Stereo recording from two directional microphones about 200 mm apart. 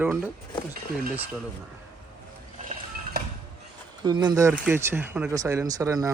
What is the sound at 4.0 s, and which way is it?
Speech, 20° right (ahead or behind).